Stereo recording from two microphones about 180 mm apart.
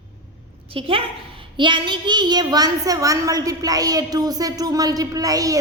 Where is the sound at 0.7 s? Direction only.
30° right (ahead or behind).